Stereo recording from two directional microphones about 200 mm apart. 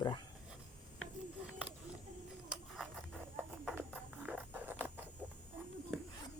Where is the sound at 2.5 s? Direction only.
5° left (ahead or behind).